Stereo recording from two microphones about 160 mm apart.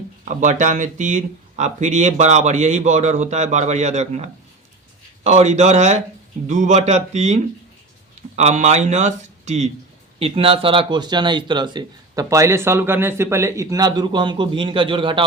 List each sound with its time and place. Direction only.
0.3 s speech: 50° right (ahead or behind)
8.4 s speech: 45° right (ahead or behind)
10.2 s speech: 35° right (ahead or behind)